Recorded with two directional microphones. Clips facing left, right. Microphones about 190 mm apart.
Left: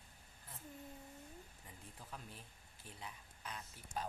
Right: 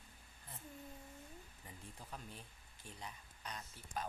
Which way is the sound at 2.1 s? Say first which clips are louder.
Right 1 dB; 5° left (ahead or behind).